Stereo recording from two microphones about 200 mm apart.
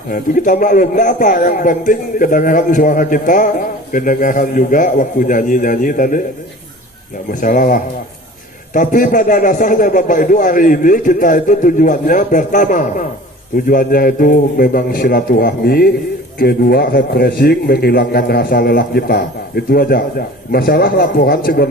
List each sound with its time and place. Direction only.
0.1 s a man's voice: 40° left (ahead or behind)
7.3 s a man's voice: 40° left (ahead or behind)